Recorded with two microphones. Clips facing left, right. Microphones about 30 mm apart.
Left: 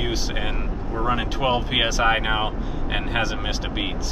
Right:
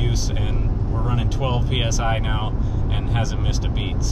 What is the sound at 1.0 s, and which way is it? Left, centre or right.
Speech, left.